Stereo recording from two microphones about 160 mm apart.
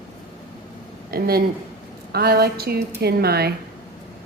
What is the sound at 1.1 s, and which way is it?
A woman's voice, 70° right (ahead or behind).